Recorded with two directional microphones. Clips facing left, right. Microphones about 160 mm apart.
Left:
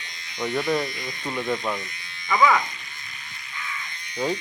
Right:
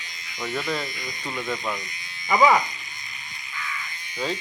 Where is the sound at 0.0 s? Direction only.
Centre (ahead or behind).